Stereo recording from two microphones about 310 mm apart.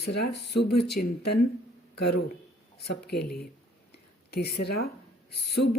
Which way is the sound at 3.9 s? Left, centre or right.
Left.